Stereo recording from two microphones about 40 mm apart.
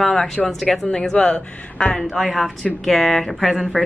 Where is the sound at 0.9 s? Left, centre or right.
Centre.